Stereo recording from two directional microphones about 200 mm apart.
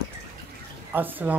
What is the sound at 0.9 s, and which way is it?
Speech, 10° right (ahead or behind).